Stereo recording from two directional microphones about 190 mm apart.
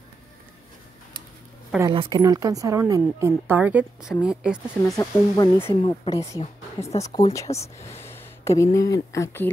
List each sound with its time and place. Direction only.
1.8 s a woman's voice: 25° right (ahead or behind); by 4.9 s 5° right (ahead or behind)
4.9 s speech: 20° left (ahead or behind)
6.9 s speech: 30° left (ahead or behind)
7.3 s speech: 15° left (ahead or behind)
8.0 s a sound: 10° left (ahead or behind)
8.7 s speech: 15° left (ahead or behind)